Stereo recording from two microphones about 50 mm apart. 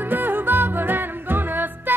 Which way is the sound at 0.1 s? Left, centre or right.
Right.